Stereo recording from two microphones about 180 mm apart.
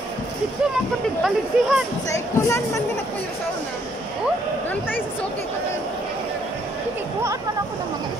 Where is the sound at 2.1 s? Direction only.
15° left (ahead or behind).